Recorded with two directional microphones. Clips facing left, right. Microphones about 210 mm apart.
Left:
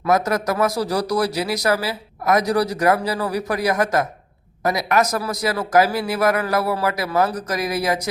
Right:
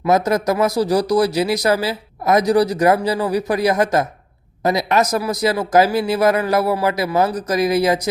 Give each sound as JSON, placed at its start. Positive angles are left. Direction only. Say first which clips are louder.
{"t": 0.0, "sound": "speech", "louder": "right 3 dB", "side_deg": -20}